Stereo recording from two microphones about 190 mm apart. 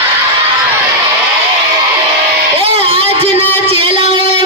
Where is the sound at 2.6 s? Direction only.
30° right (ahead or behind).